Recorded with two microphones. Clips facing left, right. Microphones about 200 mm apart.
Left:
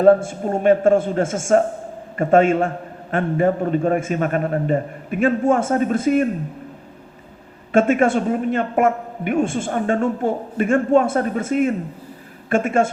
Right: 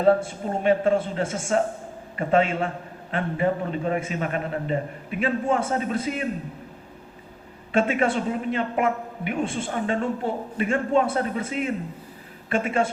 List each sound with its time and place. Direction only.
0.0 s a man's voice: 45° left (ahead or behind)
7.7 s a man's voice: 45° left (ahead or behind)